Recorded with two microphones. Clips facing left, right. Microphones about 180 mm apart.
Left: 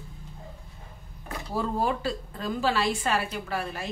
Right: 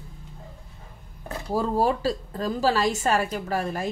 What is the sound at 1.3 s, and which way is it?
Speech, 35° right (ahead or behind).